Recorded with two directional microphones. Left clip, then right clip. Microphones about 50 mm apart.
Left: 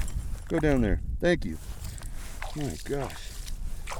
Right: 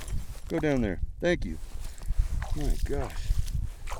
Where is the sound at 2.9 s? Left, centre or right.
Centre.